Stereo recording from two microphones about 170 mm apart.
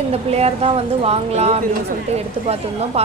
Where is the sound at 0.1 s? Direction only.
35° right (ahead or behind).